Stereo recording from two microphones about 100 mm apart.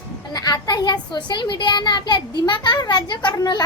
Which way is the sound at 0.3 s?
40° left (ahead or behind).